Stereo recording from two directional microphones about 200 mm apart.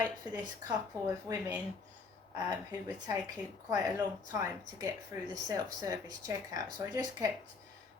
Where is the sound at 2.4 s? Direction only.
20° right (ahead or behind).